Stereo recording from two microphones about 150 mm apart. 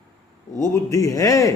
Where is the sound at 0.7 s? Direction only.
20° left (ahead or behind).